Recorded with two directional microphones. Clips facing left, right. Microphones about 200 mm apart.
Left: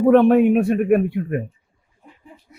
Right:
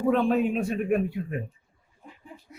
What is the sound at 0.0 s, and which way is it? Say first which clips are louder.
Speech: left 10 dB; 65° left (ahead or behind).